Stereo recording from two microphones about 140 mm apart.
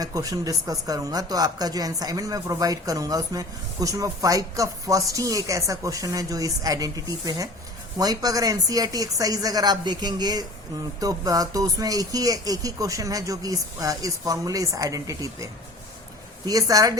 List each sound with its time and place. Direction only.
0.0 s speech: 25° right (ahead or behind)
16.5 s speech: 25° right (ahead or behind)